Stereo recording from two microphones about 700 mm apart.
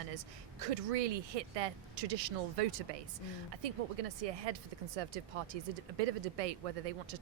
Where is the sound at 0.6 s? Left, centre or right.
Right.